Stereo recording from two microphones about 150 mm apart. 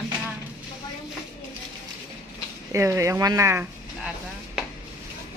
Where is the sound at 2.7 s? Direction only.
20° right (ahead or behind).